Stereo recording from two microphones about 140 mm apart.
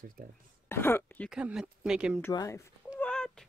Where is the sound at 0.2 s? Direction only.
90° right.